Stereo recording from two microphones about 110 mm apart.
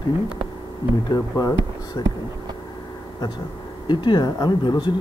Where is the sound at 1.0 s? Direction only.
35° left (ahead or behind).